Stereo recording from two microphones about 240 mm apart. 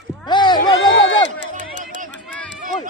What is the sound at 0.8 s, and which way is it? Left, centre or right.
Speech, left.